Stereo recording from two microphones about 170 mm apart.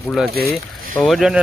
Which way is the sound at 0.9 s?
Centre (ahead or behind).